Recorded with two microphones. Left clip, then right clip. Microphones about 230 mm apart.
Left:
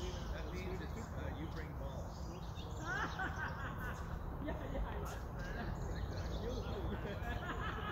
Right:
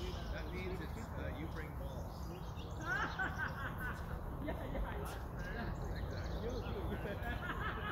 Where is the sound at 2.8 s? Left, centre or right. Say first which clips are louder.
Right 2 dB; right.